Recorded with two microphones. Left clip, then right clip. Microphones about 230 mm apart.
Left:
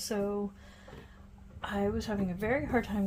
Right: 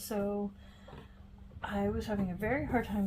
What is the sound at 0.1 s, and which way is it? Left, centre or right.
Speech, left.